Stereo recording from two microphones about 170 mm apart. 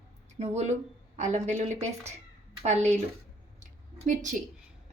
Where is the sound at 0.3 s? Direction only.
40° right (ahead or behind).